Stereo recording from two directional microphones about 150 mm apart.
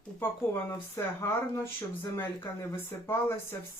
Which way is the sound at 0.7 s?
15° left (ahead or behind).